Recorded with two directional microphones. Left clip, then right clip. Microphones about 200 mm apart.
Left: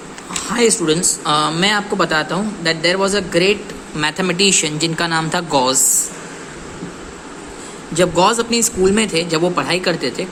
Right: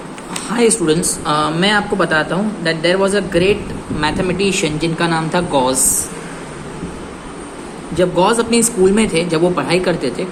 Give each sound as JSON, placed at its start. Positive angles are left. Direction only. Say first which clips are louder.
{"t": 0.4, "sound": "a man's voice", "louder": "right 1 dB", "side_deg": 15}
{"t": 7.9, "sound": "a man's voice", "louder": "even", "side_deg": 25}